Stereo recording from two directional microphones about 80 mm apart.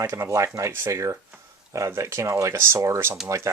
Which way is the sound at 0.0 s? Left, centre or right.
Right.